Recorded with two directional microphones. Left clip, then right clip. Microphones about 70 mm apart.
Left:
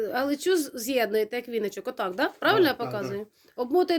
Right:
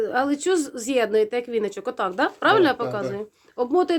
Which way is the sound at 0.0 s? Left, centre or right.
Right.